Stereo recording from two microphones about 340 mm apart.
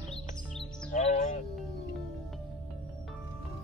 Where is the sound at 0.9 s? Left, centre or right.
Left.